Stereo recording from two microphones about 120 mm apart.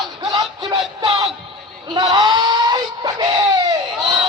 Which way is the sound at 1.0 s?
60° right (ahead or behind).